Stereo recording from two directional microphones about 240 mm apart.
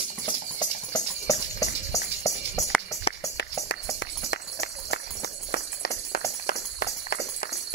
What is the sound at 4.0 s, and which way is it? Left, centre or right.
Run, left.